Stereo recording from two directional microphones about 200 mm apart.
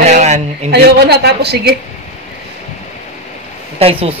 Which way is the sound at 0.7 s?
55° right (ahead or behind).